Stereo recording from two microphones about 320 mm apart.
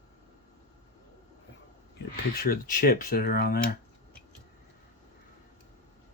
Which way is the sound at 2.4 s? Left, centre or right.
Left.